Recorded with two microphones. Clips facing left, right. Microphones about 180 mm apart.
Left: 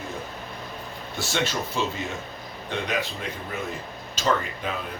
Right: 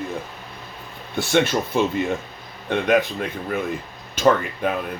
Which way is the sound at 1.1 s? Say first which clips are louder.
Right 8 dB; 55° right (ahead or behind).